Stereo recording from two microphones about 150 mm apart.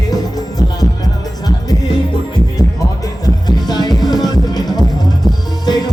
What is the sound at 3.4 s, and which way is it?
Music, 25° left (ahead or behind).